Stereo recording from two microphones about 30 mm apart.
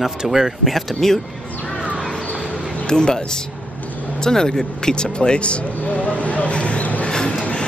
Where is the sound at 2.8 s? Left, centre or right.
Left.